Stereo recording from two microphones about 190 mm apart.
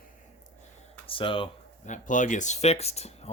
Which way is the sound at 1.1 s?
25° left (ahead or behind).